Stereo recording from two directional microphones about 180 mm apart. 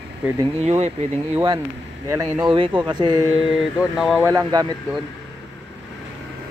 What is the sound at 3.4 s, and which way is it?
Mantra, 5° right (ahead or behind).